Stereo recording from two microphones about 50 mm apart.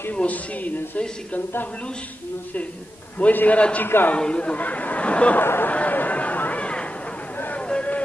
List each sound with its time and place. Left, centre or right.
0.1 s speech: left
3.2 s a man's voice: left
3.8 s a man's voice: left
4.2 s speech: left
5.4 s a man's voice: left
5.7 s a sound: left